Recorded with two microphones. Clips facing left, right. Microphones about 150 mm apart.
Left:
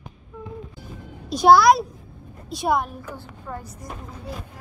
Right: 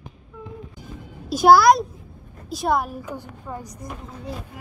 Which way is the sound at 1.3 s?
Centre (ahead or behind).